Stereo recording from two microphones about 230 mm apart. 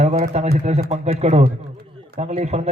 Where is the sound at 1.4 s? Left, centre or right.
Right.